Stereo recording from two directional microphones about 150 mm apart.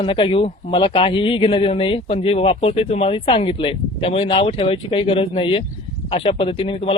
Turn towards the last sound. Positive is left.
turn(degrees=40)  # may be behind; listen again after turning